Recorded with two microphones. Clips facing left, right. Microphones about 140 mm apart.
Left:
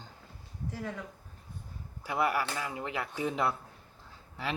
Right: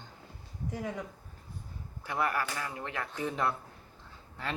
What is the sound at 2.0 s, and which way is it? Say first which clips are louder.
A woman's voice: left 2 dB; 15° left (ahead or behind).